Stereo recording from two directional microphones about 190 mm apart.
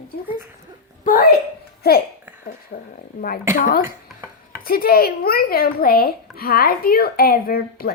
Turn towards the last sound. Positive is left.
turn(degrees=50)  # may be behind; listen again after turning